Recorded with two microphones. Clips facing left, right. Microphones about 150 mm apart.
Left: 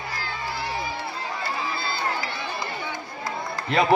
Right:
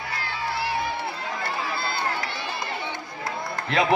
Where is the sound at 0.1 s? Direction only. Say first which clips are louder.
Right 4 dB; 65° right (ahead or behind).